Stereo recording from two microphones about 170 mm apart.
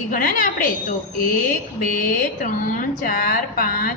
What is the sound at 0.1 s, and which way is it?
Speech, 55° left (ahead or behind).